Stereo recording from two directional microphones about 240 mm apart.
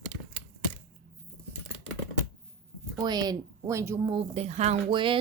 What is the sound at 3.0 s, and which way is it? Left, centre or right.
Speech, centre.